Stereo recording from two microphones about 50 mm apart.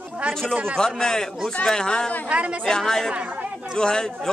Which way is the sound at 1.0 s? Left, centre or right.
Centre.